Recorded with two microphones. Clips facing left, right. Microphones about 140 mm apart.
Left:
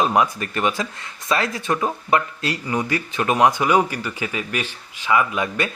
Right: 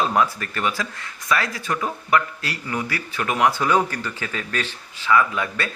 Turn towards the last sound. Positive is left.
turn(degrees=15)  # may be behind; listen again after turning